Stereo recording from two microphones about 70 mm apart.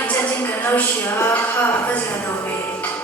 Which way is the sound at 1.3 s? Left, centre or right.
Left.